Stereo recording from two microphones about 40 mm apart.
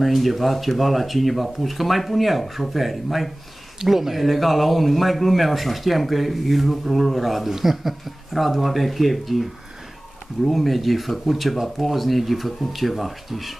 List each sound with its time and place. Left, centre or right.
0.0 s speech: centre